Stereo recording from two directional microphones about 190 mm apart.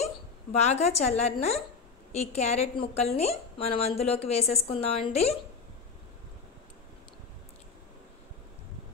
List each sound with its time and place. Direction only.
0.0 s a woman's voice: 35° left (ahead or behind)